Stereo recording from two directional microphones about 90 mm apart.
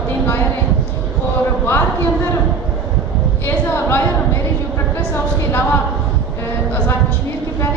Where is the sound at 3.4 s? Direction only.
25° left (ahead or behind).